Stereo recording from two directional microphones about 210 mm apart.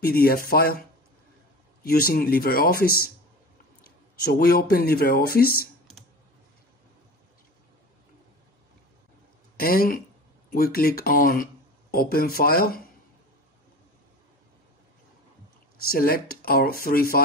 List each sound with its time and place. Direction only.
0.0 s speech: 45° left (ahead or behind)
9.6 s speech: 45° left (ahead or behind)
15.9 s speech: 45° left (ahead or behind)